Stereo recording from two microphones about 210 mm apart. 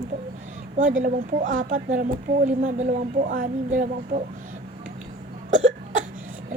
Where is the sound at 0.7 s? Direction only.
35° right (ahead or behind).